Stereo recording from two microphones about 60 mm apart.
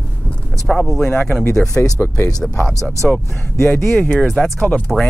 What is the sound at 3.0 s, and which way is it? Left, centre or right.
Speech, centre.